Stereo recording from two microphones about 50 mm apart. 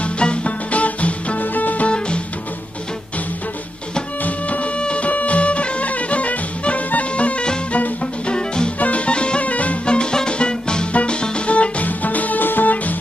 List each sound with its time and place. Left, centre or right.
0.0 s music: left
1.9 s music: left
4.2 s music: left